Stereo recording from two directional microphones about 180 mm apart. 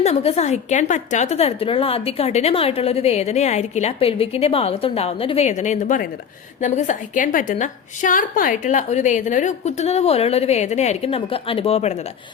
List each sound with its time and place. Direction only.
0.0 s a woman's voice: 35° left (ahead or behind)